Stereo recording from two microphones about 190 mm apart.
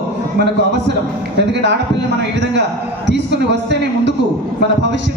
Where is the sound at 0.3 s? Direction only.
65° right (ahead or behind).